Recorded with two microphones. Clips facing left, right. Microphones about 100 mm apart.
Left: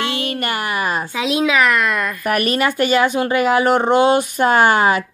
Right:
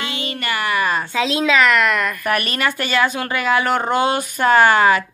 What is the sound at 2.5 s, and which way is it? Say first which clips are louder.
A woman's voice: left 4 dB; 35° left (ahead or behind).